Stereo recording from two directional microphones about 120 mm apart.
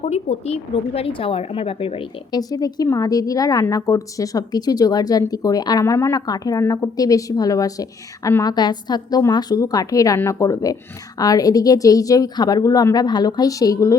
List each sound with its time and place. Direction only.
0.0 s speech: 65° left (ahead or behind); by 2.0 s 50° left (ahead or behind)
2.3 s a woman's voice: 35° left (ahead or behind)